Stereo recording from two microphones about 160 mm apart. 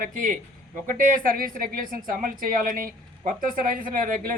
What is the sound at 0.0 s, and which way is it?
A woman's voice, 55° right (ahead or behind).